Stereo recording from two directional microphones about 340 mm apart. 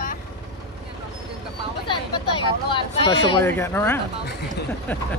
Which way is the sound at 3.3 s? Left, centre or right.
Centre.